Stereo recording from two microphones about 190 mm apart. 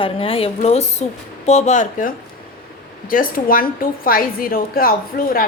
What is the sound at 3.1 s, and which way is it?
A woman's voice, 50° left (ahead or behind).